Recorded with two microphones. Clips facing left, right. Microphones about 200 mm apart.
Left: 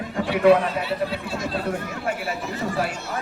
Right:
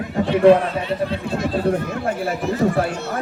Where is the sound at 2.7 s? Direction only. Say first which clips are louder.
Right 5 dB; 55° right (ahead or behind).